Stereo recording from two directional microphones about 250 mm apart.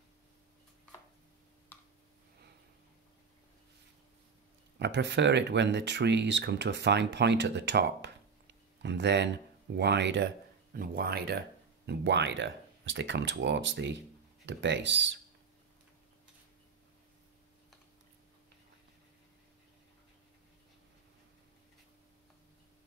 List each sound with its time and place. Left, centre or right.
4.7 s speech: right